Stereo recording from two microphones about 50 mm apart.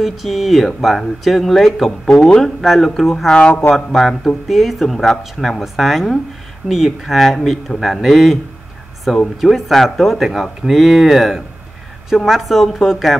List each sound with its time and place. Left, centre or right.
0.0 s speech: centre
3.3 s speech: left
3.7 s speech: centre
9.4 s speech: centre